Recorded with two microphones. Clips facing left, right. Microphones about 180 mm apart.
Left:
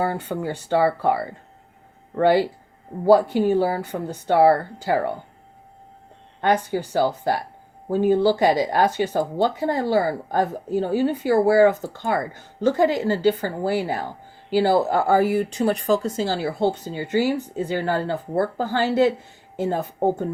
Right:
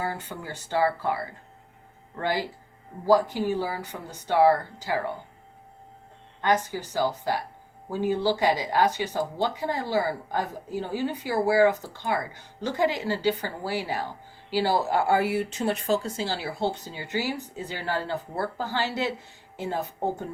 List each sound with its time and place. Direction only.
0.0 s speech: 60° left (ahead or behind)
3.0 s speech: 60° left (ahead or behind)
6.4 s speech: 60° left (ahead or behind)